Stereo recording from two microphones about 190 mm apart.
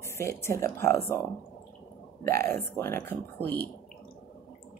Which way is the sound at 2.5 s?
15° left (ahead or behind).